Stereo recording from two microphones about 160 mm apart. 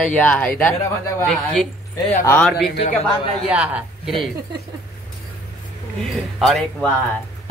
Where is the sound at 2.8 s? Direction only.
35° left (ahead or behind).